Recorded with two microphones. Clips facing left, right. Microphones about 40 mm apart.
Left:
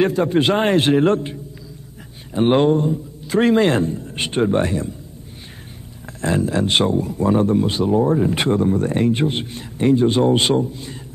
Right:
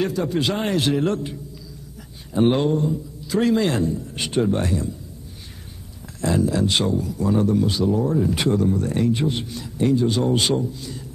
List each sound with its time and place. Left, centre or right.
0.0 s speech: left
6.0 s speech: left